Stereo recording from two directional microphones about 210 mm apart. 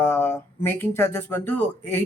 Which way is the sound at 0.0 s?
10° left (ahead or behind).